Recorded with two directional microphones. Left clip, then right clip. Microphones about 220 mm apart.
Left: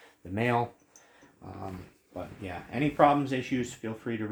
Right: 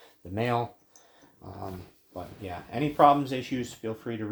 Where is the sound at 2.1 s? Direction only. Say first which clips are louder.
Right 1 dB; 25° right (ahead or behind).